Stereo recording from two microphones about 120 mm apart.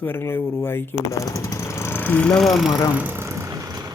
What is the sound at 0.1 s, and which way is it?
Speech, 25° left (ahead or behind).